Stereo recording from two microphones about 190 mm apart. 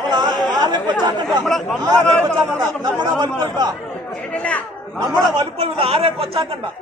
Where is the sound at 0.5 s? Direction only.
20° right (ahead or behind).